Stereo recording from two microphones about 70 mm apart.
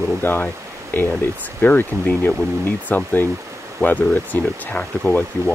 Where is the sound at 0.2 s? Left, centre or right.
Left.